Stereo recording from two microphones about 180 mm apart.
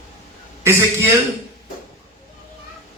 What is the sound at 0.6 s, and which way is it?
Speech, 15° right (ahead or behind).